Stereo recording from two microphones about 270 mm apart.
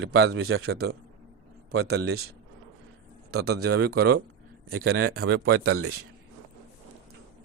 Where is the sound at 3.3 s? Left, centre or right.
Right.